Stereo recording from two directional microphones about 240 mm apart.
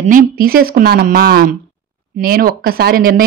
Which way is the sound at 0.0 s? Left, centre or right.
Right.